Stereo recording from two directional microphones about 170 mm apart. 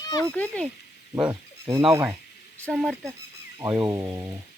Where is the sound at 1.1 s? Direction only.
20° right (ahead or behind).